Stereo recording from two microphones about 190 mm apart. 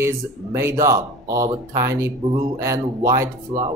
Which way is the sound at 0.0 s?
15° right (ahead or behind).